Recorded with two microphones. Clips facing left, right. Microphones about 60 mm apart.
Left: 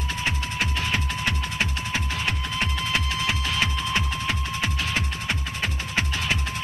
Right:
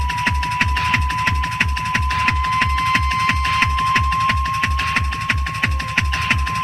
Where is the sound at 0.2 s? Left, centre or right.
Right.